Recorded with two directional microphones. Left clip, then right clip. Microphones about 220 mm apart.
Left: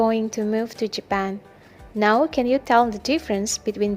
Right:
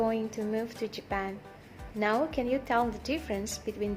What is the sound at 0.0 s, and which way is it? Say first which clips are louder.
A woman's voice: left 9 dB; 35° left (ahead or behind).